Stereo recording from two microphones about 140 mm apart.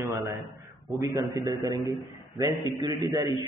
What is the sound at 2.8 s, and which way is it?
Speech, 20° right (ahead or behind).